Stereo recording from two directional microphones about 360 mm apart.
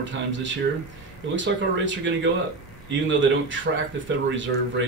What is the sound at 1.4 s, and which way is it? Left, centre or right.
Speech, right.